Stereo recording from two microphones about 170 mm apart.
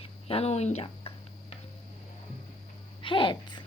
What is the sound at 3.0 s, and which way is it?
Speech, 30° left (ahead or behind).